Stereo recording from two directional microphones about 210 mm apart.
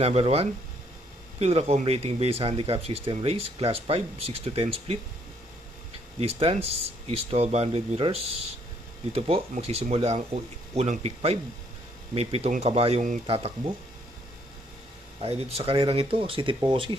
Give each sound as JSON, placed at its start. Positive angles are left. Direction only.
{"t": 0.0, "sound": "speech", "side_deg": -30}
{"t": 6.1, "sound": "speech", "side_deg": -30}
{"t": 15.2, "sound": "speech", "side_deg": -30}